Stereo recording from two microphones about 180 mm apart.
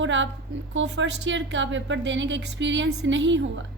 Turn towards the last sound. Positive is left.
turn(degrees=-90)